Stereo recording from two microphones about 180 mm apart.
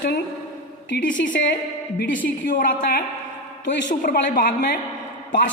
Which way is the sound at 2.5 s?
50° left (ahead or behind).